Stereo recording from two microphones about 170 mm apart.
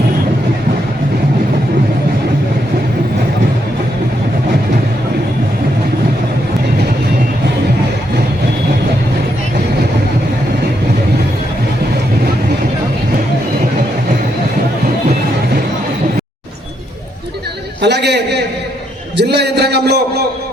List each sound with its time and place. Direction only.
17.8 s a man's voice: 85° right